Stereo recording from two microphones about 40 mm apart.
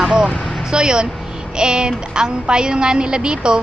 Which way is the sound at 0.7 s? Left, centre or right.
Centre.